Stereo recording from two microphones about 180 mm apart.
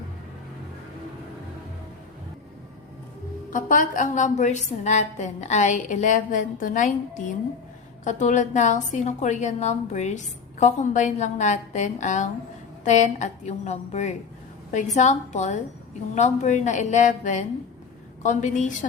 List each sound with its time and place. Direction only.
3.5 s a woman's voice: 45° left (ahead or behind)